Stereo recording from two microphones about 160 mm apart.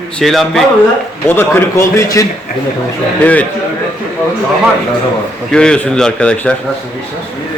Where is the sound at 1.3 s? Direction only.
15° left (ahead or behind).